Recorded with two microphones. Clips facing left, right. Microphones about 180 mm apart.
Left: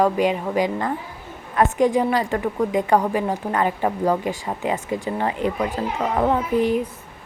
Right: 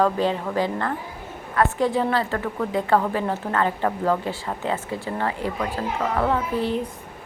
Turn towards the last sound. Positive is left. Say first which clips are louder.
# left 4 dB
turn(degrees=15)  # may be behind; listen again after turning